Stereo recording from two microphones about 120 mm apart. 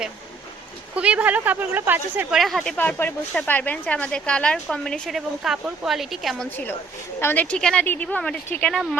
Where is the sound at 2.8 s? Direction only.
15° left (ahead or behind); by 6.4 s centre (ahead or behind).